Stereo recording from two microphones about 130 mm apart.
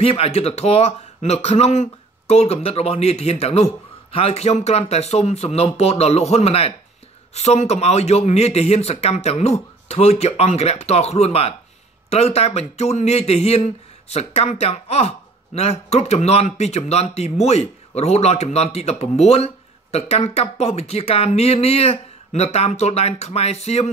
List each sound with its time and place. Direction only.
0.0 s speech: 45° left (ahead or behind)